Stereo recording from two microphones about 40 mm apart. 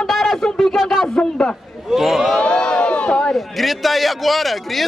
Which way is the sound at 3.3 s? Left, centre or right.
Centre.